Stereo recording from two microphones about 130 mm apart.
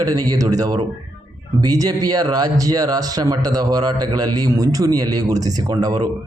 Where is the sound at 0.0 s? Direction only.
30° right (ahead or behind).